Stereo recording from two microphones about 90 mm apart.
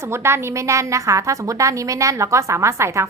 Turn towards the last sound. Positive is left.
turn(degrees=-30)  # may be behind; listen again after turning